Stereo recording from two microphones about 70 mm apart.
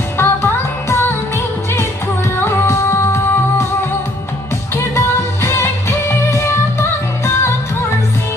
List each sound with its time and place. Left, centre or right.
0.2 s music: left
2.4 s music: left
4.7 s music: left